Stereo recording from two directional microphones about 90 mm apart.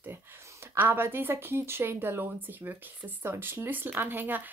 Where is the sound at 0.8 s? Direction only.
25° right (ahead or behind).